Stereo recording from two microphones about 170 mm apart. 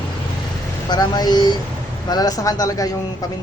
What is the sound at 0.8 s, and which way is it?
Speech, 25° left (ahead or behind).